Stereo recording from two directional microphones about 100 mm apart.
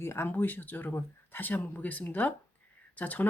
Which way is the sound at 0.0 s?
25° left (ahead or behind).